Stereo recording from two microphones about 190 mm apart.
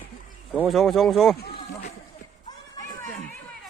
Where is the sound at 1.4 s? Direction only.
55° left (ahead or behind).